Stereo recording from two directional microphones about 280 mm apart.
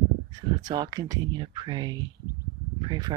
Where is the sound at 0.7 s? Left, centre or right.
Centre.